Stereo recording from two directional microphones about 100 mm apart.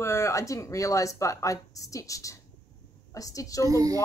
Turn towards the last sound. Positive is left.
turn(degrees=-35)  # may be behind; listen again after turning